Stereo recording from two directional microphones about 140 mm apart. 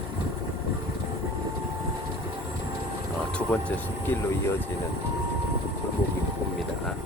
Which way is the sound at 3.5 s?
10° left (ahead or behind).